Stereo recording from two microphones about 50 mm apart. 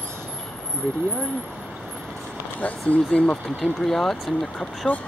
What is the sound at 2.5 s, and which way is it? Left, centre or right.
Speech, left.